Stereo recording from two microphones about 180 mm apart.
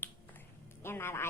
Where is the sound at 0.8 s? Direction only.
15° left (ahead or behind).